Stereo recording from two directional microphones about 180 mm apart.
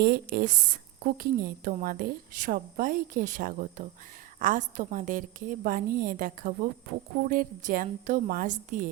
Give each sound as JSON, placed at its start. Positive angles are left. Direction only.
{"t": 0.0, "sound": "a woman's voice", "side_deg": -55}